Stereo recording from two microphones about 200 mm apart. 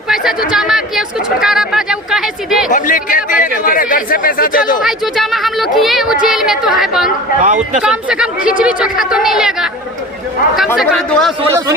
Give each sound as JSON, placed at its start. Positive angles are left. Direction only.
{"t": 0.1, "sound": "speech", "side_deg": 0}
{"t": 2.6, "sound": "speech", "side_deg": 40}
{"t": 4.8, "sound": "speech", "side_deg": 0}
{"t": 7.4, "sound": "speech", "side_deg": -35}
{"t": 7.8, "sound": "speech", "side_deg": -5}
{"t": 10.8, "sound": "speech", "side_deg": 0}